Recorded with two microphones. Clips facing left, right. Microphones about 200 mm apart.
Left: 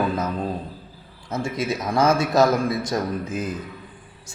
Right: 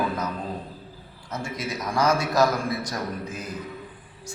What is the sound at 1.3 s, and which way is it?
A man's voice, 25° left (ahead or behind).